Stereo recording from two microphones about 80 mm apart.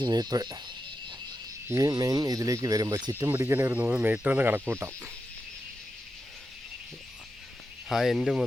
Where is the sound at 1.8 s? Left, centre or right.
Right.